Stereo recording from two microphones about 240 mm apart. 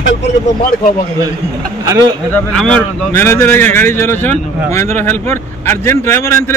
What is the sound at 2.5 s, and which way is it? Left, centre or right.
Speech, centre.